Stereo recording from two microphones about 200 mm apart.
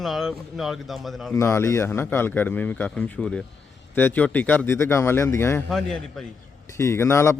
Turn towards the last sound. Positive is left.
turn(degrees=15)  # may be behind; listen again after turning